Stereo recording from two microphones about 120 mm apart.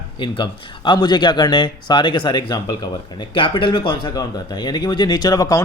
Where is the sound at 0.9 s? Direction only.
40° left (ahead or behind).